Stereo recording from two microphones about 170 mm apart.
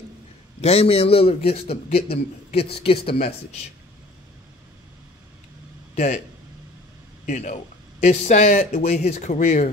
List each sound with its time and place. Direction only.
0.6 s speech: 35° left (ahead or behind)
5.9 s speech: 45° left (ahead or behind)
7.2 s speech: 45° left (ahead or behind)